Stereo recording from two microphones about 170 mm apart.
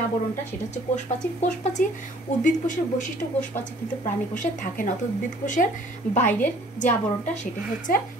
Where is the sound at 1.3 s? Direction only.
45° left (ahead or behind).